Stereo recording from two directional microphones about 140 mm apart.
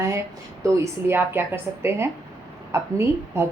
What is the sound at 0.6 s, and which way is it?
A woman's voice, 15° right (ahead or behind).